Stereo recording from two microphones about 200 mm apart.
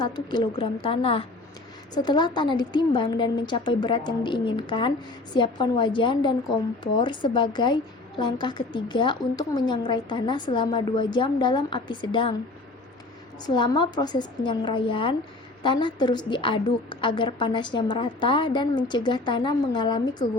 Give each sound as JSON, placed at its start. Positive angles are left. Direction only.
{"t": 0.0, "sound": "a woman's voice", "side_deg": 20}
{"t": 13.4, "sound": "a woman's voice", "side_deg": 20}